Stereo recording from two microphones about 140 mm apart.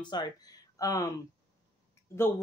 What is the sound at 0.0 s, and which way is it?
Speech, 30° left (ahead or behind).